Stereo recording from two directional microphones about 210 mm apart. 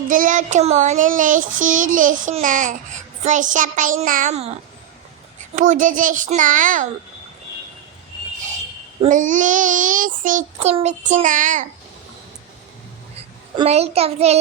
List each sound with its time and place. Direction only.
0.1 s child singing: 40° right (ahead or behind)
5.5 s child singing: 35° right (ahead or behind)
9.0 s child singing: 35° right (ahead or behind)
13.6 s a child's voice: 30° right (ahead or behind)